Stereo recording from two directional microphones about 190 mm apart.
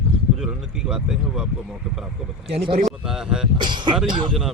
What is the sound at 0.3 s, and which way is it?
Speech, 5° right (ahead or behind).